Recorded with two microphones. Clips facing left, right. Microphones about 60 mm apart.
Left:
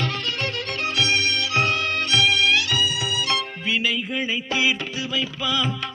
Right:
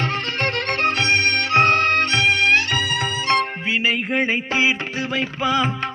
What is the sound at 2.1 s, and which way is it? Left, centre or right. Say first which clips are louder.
Music: left 1 dB; right.